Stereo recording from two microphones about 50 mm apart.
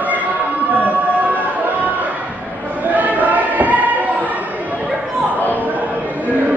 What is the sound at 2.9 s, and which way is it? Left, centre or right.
Choir, right.